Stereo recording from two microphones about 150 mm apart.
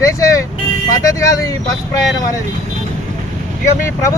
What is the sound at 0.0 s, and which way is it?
Vehicle, 20° left (ahead or behind).